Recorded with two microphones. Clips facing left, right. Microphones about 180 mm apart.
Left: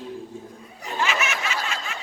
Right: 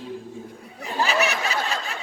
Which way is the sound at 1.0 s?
35° right (ahead or behind).